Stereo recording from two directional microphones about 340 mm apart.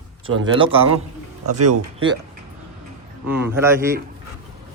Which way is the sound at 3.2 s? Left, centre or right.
Centre.